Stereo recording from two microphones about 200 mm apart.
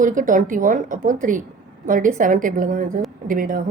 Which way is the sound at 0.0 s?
40° right (ahead or behind).